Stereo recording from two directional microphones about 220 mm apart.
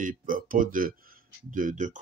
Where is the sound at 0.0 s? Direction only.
40° right (ahead or behind).